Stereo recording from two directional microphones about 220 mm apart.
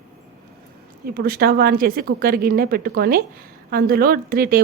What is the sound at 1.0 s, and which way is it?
A woman's voice, 45° right (ahead or behind).